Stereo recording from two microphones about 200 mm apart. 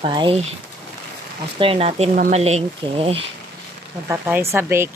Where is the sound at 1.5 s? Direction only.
25° right (ahead or behind).